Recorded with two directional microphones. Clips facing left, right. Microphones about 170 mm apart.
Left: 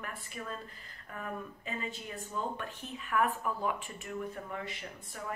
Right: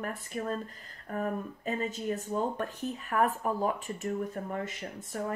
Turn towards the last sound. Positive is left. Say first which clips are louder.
# right 8 dB
turn(degrees=-45)  # may be behind; listen again after turning